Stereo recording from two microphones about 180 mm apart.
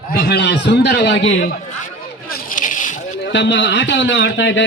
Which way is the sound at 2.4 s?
45° left (ahead or behind).